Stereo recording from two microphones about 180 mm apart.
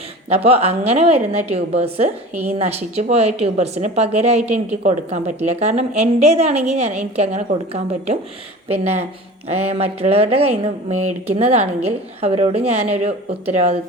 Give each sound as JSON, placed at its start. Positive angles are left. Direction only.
{"t": 0.3, "sound": "a woman's voice", "side_deg": -35}
{"t": 2.3, "sound": "speech", "side_deg": -10}
{"t": 2.6, "sound": "a woman's voice", "side_deg": -35}
{"t": 4.4, "sound": "speech", "side_deg": -10}
{"t": 4.8, "sound": "a woman's voice", "side_deg": -40}
{"t": 9.5, "sound": "a woman's voice", "side_deg": -35}